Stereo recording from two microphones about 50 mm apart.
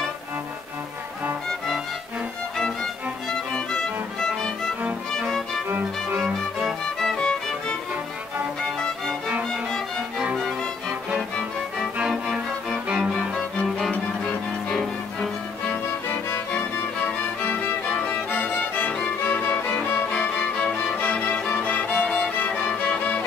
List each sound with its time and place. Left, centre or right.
2.6 s music: centre
7.0 s music: centre
13.8 s music: centre
16.5 s music: left
20.1 s music: centre
21.9 s music: centre
22.9 s music: left